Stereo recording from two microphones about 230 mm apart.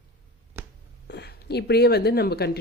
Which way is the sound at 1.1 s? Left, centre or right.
Left.